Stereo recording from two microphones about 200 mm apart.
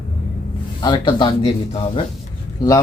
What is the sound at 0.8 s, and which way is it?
Speech, 20° left (ahead or behind).